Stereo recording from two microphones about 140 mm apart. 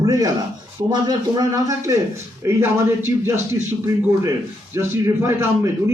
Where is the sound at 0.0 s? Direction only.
25° right (ahead or behind).